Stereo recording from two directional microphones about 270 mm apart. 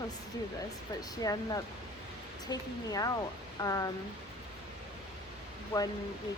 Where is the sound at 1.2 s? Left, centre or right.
Centre.